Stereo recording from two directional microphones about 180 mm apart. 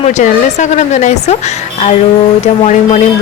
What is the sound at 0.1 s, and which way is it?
Speech, 40° left (ahead or behind).